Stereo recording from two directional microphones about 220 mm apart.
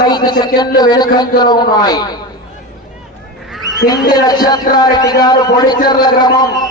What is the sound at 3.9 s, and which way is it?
A man's voice, 20° left (ahead or behind).